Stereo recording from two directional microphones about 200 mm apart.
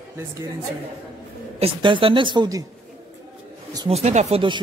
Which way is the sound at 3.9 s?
35° right (ahead or behind).